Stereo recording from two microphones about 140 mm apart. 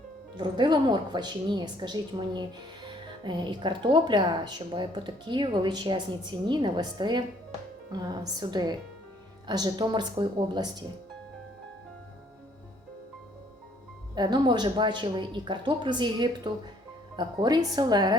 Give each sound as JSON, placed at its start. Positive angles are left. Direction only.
{"t": 0.3, "sound": "speech", "side_deg": -35}
{"t": 14.2, "sound": "speech", "side_deg": -30}